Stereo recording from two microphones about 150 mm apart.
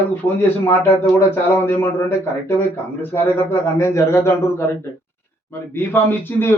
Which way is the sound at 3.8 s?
20° left (ahead or behind).